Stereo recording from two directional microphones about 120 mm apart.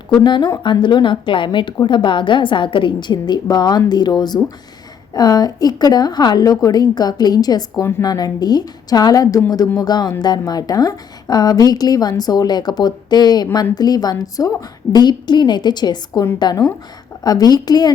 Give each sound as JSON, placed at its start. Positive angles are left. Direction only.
{"t": 0.1, "sound": "a woman's voice", "side_deg": 40}
{"t": 7.8, "sound": "a woman's voice", "side_deg": 20}
{"t": 8.0, "sound": "a woman's voice", "side_deg": 35}